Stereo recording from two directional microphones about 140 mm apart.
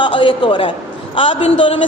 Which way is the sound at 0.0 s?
35° left (ahead or behind).